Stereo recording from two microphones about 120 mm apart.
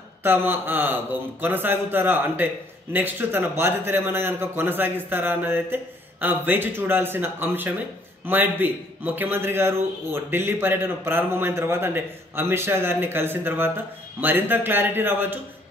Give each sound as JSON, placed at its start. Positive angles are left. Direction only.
{"t": 0.2, "sound": "a man's voice", "side_deg": -15}